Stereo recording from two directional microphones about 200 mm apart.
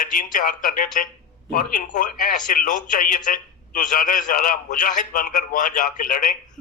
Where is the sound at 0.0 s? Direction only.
40° left (ahead or behind).